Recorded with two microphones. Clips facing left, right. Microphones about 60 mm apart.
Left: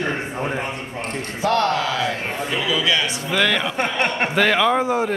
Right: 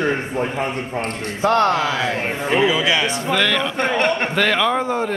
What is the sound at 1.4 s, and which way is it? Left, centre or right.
Speech, right.